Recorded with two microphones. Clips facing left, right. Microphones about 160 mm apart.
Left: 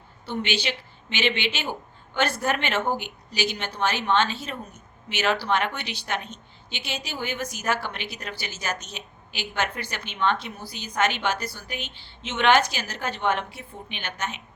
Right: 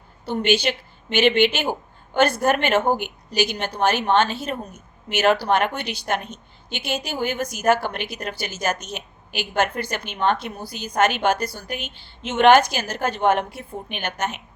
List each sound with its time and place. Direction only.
0.3 s a woman's voice: 45° right (ahead or behind)